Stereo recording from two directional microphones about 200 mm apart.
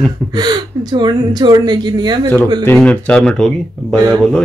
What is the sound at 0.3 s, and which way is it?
Speech, 20° right (ahead or behind).